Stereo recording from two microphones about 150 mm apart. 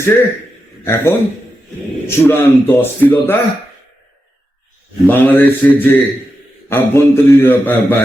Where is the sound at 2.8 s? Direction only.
15° left (ahead or behind).